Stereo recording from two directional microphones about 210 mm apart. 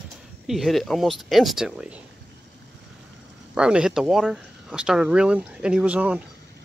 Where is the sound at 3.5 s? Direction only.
5° right (ahead or behind).